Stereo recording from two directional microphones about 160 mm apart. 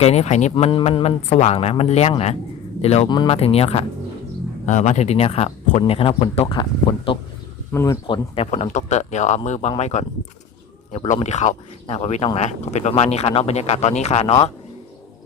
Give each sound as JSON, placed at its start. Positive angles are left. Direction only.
{"t": 0.0, "sound": "speech", "side_deg": 40}
{"t": 7.7, "sound": "speech", "side_deg": 15}
{"t": 8.0, "sound": "speech", "side_deg": 30}
{"t": 8.4, "sound": "speech", "side_deg": 45}